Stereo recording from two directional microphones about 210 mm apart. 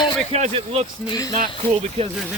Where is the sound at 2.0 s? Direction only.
30° right (ahead or behind).